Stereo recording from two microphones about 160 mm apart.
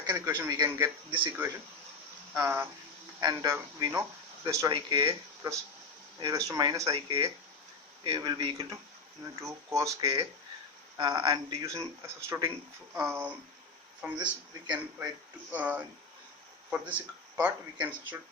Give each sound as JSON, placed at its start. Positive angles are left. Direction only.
{"t": 0.0, "sound": "a man's voice", "side_deg": -20}
{"t": 2.3, "sound": "a man's voice", "side_deg": -15}
{"t": 6.9, "sound": "a man's voice", "side_deg": -35}
{"t": 10.9, "sound": "a man's voice", "side_deg": -25}